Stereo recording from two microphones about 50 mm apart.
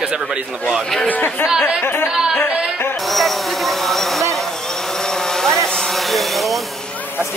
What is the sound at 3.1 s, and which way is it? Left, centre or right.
Vehicle, centre.